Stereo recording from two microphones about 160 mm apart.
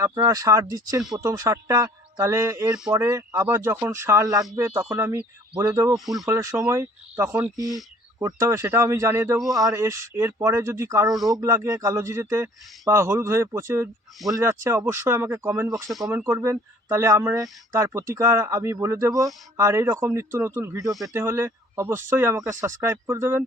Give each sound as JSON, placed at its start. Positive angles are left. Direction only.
{"t": 0.3, "sound": "speech", "side_deg": -20}